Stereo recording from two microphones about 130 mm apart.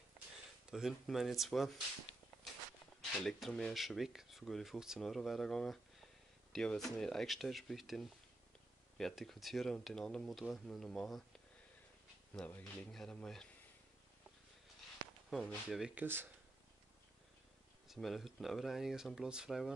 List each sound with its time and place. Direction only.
0.7 s speech: 5° right (ahead or behind)
3.0 s speech: centre (ahead or behind)
12.4 s speech: 10° left (ahead or behind)
15.2 s speech: centre (ahead or behind)
17.8 s speech: centre (ahead or behind)